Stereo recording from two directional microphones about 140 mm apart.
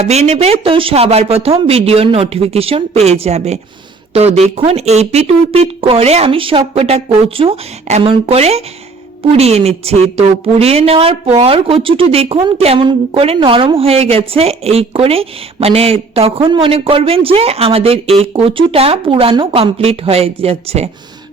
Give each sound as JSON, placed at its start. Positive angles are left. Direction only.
{"t": 0.0, "sound": "speech", "side_deg": -50}